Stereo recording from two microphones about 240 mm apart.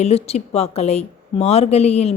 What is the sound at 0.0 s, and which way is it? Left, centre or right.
A woman's voice, left.